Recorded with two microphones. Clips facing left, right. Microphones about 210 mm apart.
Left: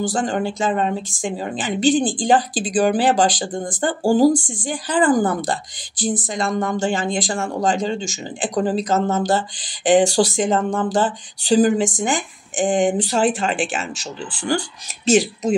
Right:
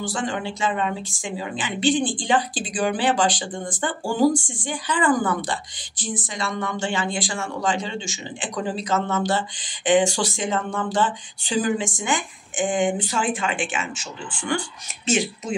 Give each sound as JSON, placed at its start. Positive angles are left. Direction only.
{"t": 0.1, "sound": "a woman's voice", "side_deg": 40}